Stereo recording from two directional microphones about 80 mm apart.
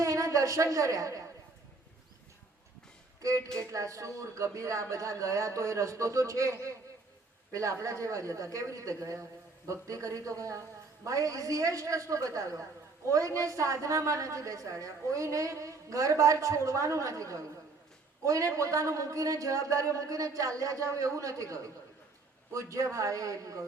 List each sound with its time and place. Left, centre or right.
0.0 s a woman's voice: right
3.2 s a woman's voice: right